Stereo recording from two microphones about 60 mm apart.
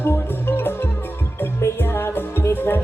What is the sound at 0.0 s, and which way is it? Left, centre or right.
Music, left.